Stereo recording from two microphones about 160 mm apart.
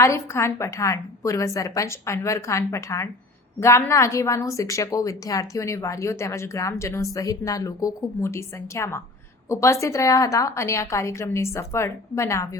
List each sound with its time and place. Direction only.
0.0 s a woman's voice: 15° left (ahead or behind)